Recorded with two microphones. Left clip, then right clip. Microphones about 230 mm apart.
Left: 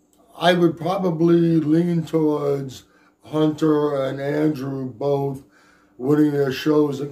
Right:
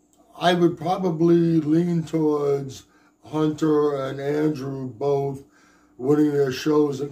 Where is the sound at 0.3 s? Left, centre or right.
Centre.